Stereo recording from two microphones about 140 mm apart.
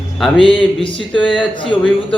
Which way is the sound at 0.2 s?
Centre (ahead or behind).